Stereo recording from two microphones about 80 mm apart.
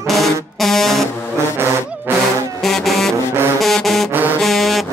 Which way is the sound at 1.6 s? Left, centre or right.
Right.